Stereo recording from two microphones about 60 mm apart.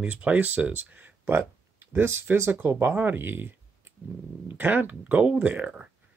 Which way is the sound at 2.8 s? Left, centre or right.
Right.